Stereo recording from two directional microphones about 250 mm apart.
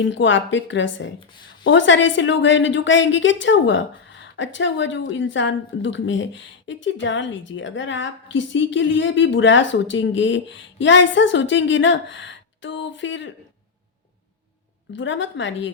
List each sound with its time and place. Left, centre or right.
0.0 s a woman's voice: left
14.9 s a woman's voice: left